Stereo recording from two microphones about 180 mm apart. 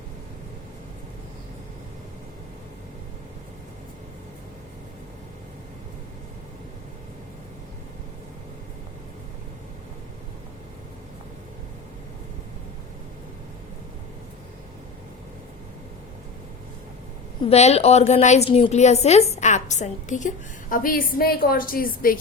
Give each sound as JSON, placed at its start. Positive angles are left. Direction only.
{"t": 17.4, "sound": "a woman's voice", "side_deg": 35}